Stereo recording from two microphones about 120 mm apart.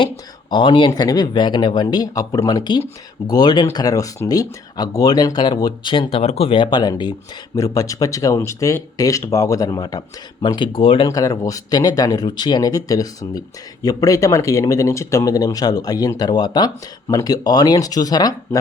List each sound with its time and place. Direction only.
0.5 s speech: 40° left (ahead or behind)
11.1 s speech: 30° left (ahead or behind)